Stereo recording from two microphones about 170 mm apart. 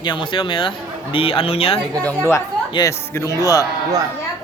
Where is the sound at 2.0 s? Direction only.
10° left (ahead or behind).